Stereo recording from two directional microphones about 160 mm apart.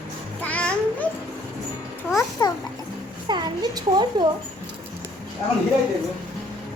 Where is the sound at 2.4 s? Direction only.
25° left (ahead or behind).